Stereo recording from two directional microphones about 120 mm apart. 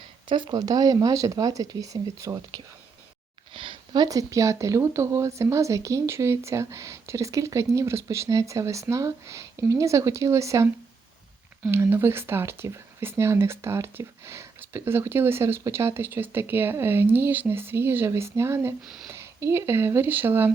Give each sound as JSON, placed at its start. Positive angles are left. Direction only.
{"t": 0.3, "sound": "speech", "side_deg": -40}
{"t": 3.5, "sound": "speech", "side_deg": -45}
{"t": 11.7, "sound": "speech", "side_deg": -20}